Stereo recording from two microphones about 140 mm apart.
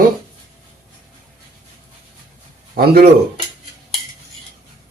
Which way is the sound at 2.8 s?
90° right.